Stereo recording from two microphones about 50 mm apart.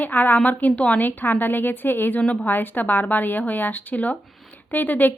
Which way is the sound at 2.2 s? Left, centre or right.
Left.